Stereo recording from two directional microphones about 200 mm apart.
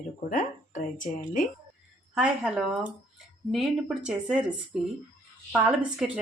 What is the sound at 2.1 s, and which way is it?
A woman's voice, 5° right (ahead or behind).